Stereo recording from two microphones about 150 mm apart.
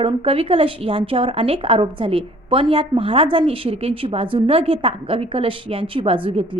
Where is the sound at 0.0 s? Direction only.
40° right (ahead or behind).